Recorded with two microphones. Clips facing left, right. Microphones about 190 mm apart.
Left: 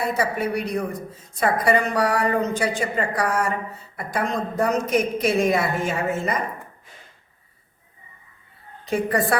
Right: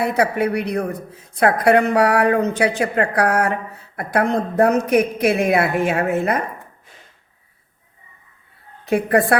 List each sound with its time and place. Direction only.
0.0 s a woman's voice: 65° right (ahead or behind)
8.9 s a woman's voice: 60° right (ahead or behind)